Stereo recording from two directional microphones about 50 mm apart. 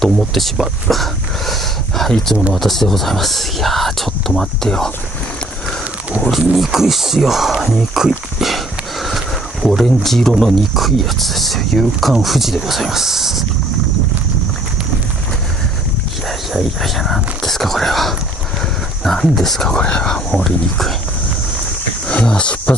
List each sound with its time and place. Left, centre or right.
0.0 s speech: centre
6.3 s speech: centre
16.3 s speech: centre
19.8 s speech: centre
20.3 s speech: centre
22.0 s a sound: left